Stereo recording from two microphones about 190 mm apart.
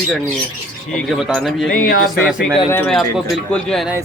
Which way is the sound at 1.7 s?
50° left (ahead or behind).